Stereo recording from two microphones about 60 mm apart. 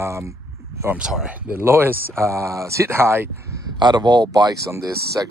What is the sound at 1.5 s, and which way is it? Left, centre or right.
Speech, right.